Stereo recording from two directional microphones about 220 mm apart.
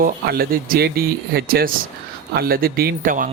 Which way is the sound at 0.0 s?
40° right (ahead or behind).